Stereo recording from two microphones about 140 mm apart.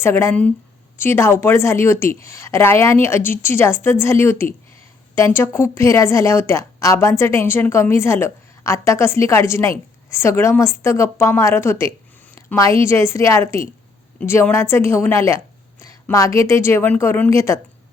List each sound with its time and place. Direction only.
0.0 s a woman's voice: 20° left (ahead or behind)